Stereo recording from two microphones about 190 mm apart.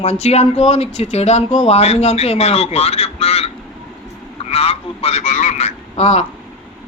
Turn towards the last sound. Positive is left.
turn(degrees=35)  # may be behind; listen again after turning